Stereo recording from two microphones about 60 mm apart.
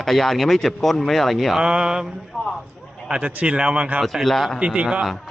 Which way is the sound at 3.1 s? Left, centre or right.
Right.